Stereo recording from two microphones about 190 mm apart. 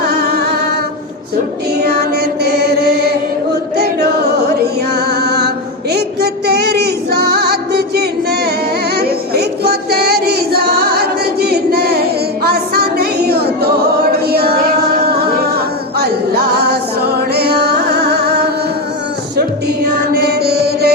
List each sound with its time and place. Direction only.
0.1 s music: 55° right (ahead or behind)
3.8 s music: 55° right (ahead or behind)
5.9 s female singing: 60° right (ahead or behind)
9.0 s music: 55° right (ahead or behind)
16.0 s music: 55° right (ahead or behind)
20.1 s mantra: 55° right (ahead or behind)